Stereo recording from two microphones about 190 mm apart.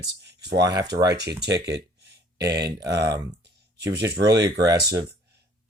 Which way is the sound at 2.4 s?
60° right (ahead or behind).